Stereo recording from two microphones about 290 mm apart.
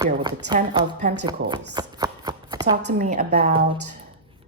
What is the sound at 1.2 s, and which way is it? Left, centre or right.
Shuffling cards, centre.